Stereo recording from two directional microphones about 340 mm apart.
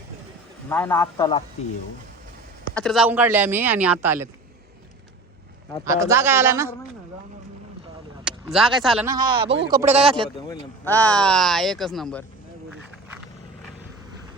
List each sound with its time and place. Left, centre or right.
0.7 s a man's voice: centre
2.7 s speech: centre
5.8 s speech: centre
8.2 s speech: centre
10.5 s speech: centre